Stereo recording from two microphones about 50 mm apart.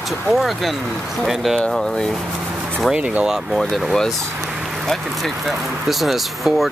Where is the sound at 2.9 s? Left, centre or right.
Right.